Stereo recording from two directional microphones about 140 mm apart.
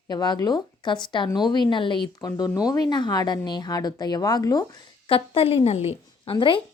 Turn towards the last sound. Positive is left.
turn(degrees=35)  # may be behind; listen again after turning